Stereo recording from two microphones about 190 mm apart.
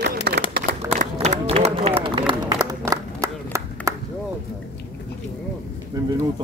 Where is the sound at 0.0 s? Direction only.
55° right (ahead or behind).